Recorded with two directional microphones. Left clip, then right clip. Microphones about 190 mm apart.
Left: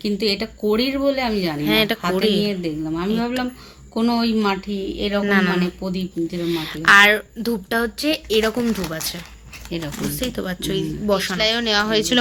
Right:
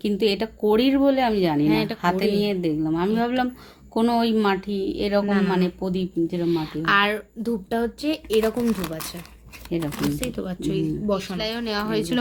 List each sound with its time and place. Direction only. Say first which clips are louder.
0.0 s speech: left 1 dB; 55° right (ahead or behind)
1.6 s speech: left 4 dB; 5° left (ahead or behind)
2.0 s speech: left 2 dB; 60° right (ahead or behind)
5.2 s speech: left 6 dB; 5° left (ahead or behind)
5.5 s speech: left 1 dB; 60° right (ahead or behind)
6.5 s speech: left 9 dB; centre (ahead or behind)
9.6 s speech: right 1 dB; 40° right (ahead or behind)
10.2 s speech: left 3 dB; 5° left (ahead or behind)